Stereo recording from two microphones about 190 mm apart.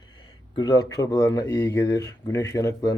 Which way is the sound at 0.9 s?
20° left (ahead or behind).